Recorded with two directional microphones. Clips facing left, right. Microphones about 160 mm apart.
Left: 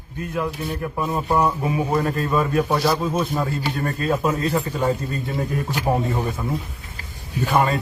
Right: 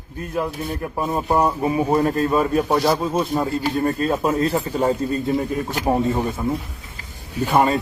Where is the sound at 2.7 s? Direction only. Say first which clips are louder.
Right 2 dB; 20° right (ahead or behind).